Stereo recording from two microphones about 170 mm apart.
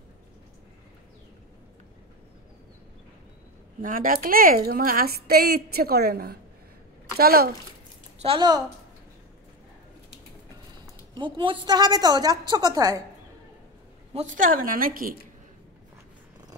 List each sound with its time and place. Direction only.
3.8 s a woman's voice: 55° right (ahead or behind)
8.2 s a woman's voice: 30° right (ahead or behind)
11.1 s a woman's voice: 30° right (ahead or behind)
14.1 s a woman's voice: 50° right (ahead or behind)